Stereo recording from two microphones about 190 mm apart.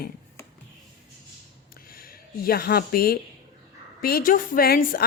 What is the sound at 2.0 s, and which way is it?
A woman's voice, 50° left (ahead or behind).